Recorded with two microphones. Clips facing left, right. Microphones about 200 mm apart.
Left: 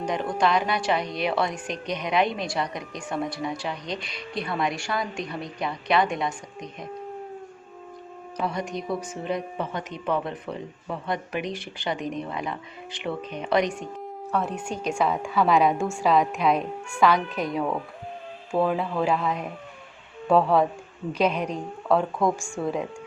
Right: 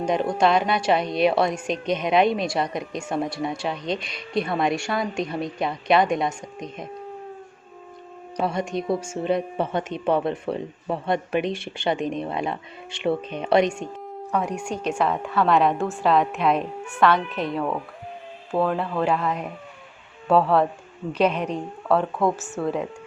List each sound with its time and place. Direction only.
0.0 s speech: 25° right (ahead or behind)
8.4 s speech: 25° right (ahead or behind)
14.3 s speech: 15° right (ahead or behind)
14.8 s a woman's voice: 10° left (ahead or behind)
20.2 s a woman's voice: 5° right (ahead or behind)
21.2 s a woman's voice: 10° left (ahead or behind)
21.8 s a woman's voice: 10° right (ahead or behind)